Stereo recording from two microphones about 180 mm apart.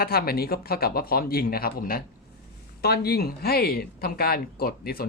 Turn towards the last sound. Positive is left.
turn(degrees=55)  # may be behind; listen again after turning